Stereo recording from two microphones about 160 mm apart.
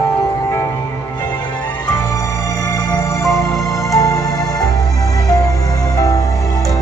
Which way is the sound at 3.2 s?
20° left (ahead or behind).